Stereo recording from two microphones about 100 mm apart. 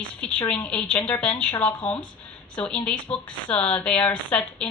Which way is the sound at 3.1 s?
10° left (ahead or behind).